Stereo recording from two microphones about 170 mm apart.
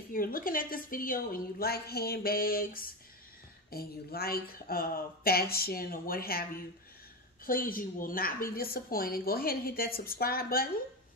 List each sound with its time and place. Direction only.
0.1 s a woman's voice: 55° left (ahead or behind)
7.4 s a woman's voice: 55° left (ahead or behind)